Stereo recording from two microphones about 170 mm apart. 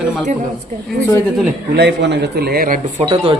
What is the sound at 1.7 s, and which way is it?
A man's voice, 80° right.